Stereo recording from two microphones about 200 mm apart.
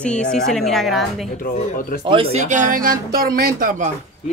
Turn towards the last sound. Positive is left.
turn(degrees=-40)  # may be behind; listen again after turning